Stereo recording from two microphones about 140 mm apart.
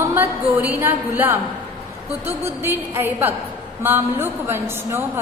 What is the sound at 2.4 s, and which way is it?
A woman's voice, 15° right (ahead or behind).